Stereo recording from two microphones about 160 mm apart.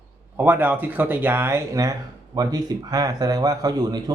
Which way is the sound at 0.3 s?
10° right (ahead or behind).